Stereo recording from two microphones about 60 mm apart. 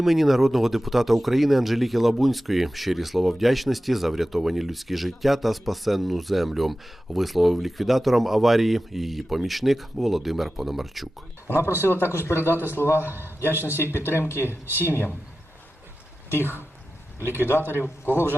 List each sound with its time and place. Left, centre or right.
0.0 s speech: centre
11.4 s speech: left
13.1 s a man's voice: right
13.6 s a man's voice: left
14.7 s speech: right
17.2 s a man's voice: right
17.7 s a man's voice: left